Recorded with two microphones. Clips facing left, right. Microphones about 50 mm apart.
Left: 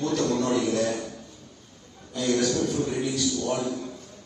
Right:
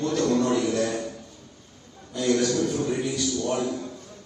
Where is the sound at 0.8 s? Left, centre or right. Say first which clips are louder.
Even; right.